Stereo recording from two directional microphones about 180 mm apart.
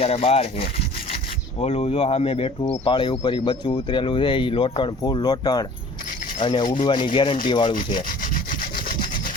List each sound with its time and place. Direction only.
0.0 s speech: 35° left (ahead or behind)
1.6 s speech: 35° left (ahead or behind)